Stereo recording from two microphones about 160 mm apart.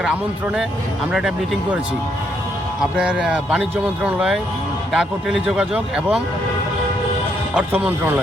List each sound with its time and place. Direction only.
0.0 s speech: 5° right (ahead or behind)
2.9 s speech: 5° right (ahead or behind)
7.5 s speech: 10° right (ahead or behind)